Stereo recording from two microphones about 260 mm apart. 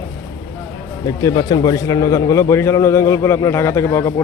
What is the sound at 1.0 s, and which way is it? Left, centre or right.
A man's voice, centre.